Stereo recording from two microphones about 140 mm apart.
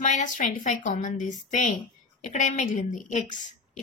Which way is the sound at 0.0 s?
65° left (ahead or behind).